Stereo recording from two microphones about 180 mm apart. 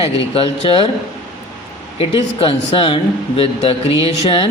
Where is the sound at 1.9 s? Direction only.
30° left (ahead or behind).